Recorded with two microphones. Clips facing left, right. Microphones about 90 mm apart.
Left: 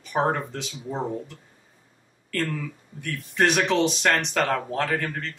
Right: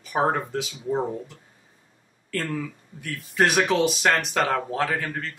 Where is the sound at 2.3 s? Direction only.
5° right (ahead or behind).